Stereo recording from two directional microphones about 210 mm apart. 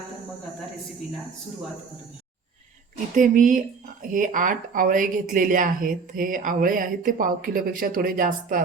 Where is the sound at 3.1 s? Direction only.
40° right (ahead or behind).